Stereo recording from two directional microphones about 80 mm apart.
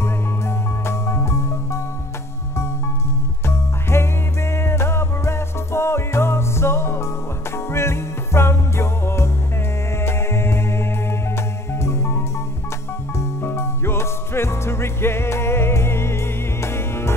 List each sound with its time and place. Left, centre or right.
0.0 s music: left
3.4 s music: left
13.2 s music: left